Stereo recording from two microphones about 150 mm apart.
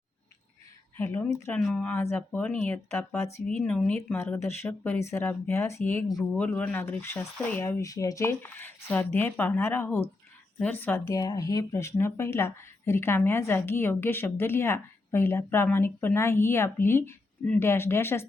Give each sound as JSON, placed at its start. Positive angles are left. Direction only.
{"t": 0.9, "sound": "speech", "side_deg": 15}
{"t": 1.5, "sound": "speech", "side_deg": 5}
{"t": 11.1, "sound": "speech", "side_deg": 25}